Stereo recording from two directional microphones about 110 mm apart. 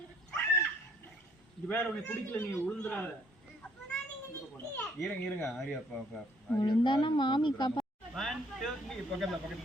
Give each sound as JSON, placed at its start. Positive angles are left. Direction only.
{"t": 0.3, "sound": "a sound", "side_deg": 10}
{"t": 1.6, "sound": "a man's voice", "side_deg": 15}
{"t": 4.5, "sound": "children playing", "side_deg": 20}
{"t": 4.9, "sound": "speech", "side_deg": 0}
{"t": 6.6, "sound": "speech", "side_deg": 45}
{"t": 8.1, "sound": "speech", "side_deg": 0}